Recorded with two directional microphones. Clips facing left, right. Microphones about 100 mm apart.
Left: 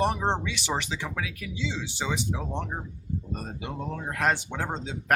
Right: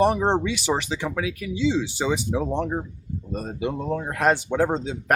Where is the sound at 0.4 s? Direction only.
15° right (ahead or behind).